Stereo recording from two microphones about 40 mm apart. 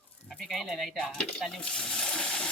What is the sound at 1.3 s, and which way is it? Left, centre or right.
Water, centre.